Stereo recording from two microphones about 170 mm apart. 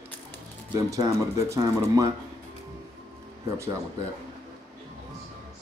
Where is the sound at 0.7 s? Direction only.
20° right (ahead or behind).